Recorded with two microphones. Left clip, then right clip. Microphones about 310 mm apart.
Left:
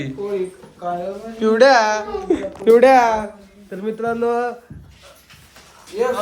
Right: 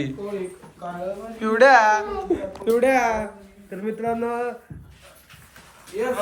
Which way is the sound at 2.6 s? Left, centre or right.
Left.